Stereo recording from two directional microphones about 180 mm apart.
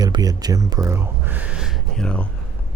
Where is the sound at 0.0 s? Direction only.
20° right (ahead or behind); by 2.2 s 5° left (ahead or behind).